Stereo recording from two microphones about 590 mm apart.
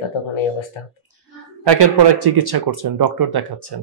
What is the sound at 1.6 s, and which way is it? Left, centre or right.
Speech, right.